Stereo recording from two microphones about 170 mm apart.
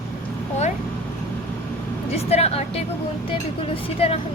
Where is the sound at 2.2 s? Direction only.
35° left (ahead or behind).